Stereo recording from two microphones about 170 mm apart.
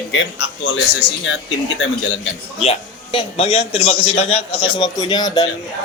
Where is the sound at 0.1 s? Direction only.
90° left.